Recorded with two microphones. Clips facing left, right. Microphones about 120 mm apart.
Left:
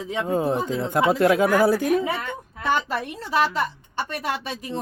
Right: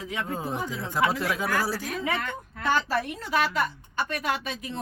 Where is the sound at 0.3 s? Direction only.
60° left (ahead or behind).